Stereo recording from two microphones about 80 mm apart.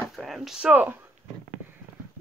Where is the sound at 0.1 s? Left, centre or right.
Centre; by 1.0 s right.